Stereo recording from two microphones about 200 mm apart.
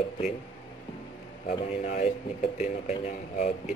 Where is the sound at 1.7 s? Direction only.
35° left (ahead or behind).